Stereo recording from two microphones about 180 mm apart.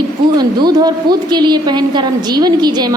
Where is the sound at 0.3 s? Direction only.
20° right (ahead or behind).